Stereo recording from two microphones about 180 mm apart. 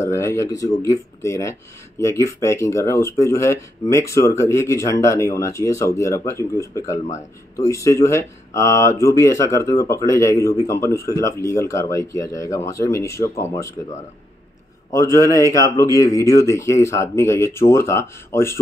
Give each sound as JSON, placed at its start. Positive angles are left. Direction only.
{"t": 0.0, "sound": "speech", "side_deg": 15}
{"t": 14.9, "sound": "speech", "side_deg": 15}